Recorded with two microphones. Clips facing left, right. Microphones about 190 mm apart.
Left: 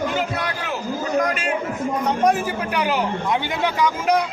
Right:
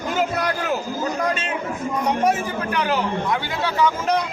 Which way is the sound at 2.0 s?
5° right (ahead or behind).